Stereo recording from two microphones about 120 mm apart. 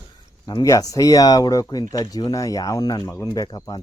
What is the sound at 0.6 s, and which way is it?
Speech, 30° left (ahead or behind).